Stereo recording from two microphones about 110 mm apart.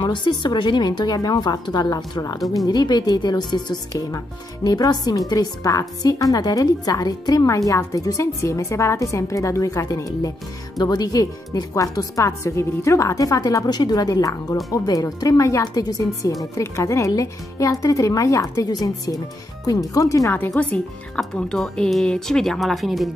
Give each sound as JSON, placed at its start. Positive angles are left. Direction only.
{"t": 0.0, "sound": "a woman's voice", "side_deg": 45}
{"t": 21.2, "sound": "speech", "side_deg": 5}